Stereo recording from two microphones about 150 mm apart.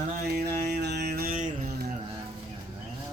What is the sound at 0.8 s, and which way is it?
Music, 90° right.